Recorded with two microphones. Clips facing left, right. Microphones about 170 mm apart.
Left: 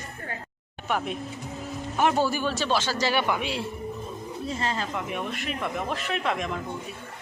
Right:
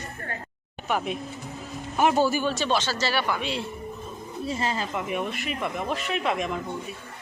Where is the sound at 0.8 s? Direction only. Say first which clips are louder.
Right 1 dB; 5° right (ahead or behind).